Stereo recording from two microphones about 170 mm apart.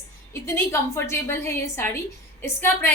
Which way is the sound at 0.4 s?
15° left (ahead or behind).